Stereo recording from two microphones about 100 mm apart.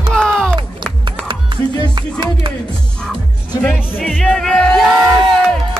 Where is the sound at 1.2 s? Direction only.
50° right (ahead or behind).